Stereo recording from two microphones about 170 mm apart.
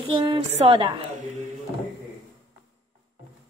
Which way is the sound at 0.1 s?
35° right (ahead or behind).